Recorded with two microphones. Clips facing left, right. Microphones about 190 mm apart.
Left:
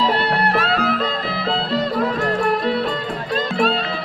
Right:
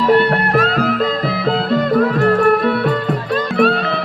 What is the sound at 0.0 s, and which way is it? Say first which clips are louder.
Music: right 6 dB; 50° right (ahead or behind).